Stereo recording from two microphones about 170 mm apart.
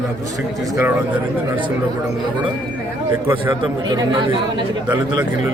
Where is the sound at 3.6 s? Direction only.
25° right (ahead or behind).